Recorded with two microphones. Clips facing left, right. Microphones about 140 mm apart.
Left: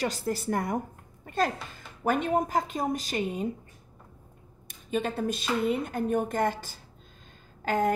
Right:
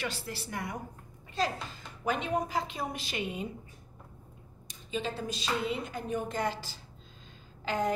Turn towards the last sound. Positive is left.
turn(degrees=50)  # may be behind; listen again after turning